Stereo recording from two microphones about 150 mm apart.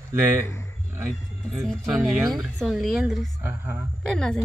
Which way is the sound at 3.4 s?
15° right (ahead or behind).